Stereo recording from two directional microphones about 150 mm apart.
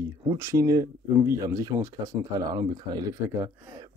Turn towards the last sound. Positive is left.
turn(degrees=-20)  # may be behind; listen again after turning